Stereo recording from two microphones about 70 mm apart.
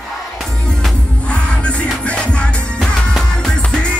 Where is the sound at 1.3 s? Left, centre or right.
Centre.